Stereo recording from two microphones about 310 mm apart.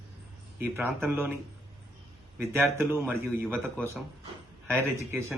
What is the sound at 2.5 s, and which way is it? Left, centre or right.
Speech, centre.